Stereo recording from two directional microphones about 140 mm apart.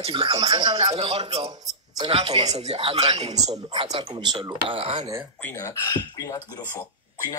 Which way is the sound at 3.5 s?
35° right (ahead or behind).